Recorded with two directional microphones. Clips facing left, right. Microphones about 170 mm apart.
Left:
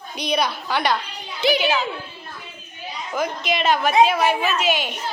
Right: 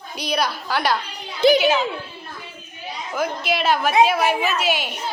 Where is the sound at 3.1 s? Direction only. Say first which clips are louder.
Right 1 dB; 5° right (ahead or behind).